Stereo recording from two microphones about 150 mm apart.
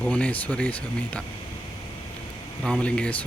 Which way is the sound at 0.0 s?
10° left (ahead or behind).